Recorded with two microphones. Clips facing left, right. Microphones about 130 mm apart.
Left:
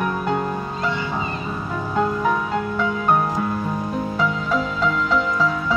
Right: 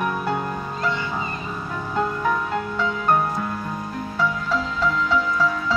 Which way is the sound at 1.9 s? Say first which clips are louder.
Left 2 dB; 5° left (ahead or behind).